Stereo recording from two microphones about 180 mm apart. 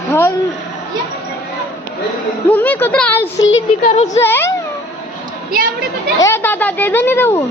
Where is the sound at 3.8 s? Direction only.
40° left (ahead or behind).